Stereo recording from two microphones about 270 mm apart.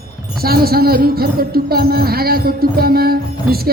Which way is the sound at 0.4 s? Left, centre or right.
Right.